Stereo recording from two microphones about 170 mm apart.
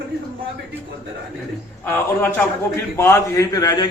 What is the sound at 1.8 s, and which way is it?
A man's voice, 10° left (ahead or behind).